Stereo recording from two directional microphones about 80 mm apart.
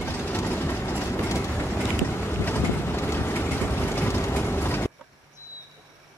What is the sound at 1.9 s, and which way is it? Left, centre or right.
Vehicle, left.